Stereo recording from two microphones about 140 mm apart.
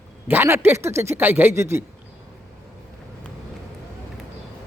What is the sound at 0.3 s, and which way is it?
Speech, 15° right (ahead or behind).